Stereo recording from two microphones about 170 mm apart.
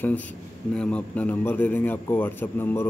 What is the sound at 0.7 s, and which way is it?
Speech, 5° left (ahead or behind).